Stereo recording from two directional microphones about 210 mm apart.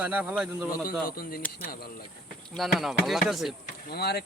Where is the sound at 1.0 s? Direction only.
45° left (ahead or behind).